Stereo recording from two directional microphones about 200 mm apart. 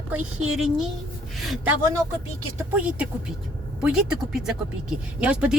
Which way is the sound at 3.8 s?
5° right (ahead or behind).